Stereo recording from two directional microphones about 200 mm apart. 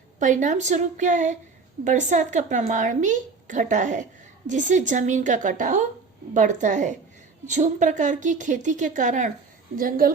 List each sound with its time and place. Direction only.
0.2 s a woman's voice: 40° right (ahead or behind)